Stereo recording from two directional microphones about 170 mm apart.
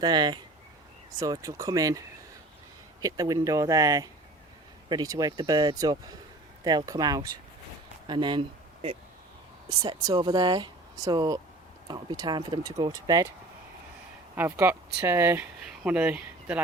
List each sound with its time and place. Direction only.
0.0 s speech: 25° right (ahead or behind)
14.3 s speech: 15° right (ahead or behind)